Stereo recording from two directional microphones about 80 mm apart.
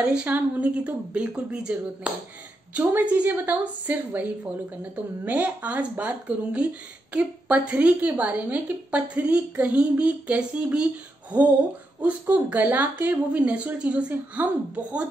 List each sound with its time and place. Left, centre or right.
0.0 s speech: centre
2.8 s a woman's voice: right
12.0 s speech: centre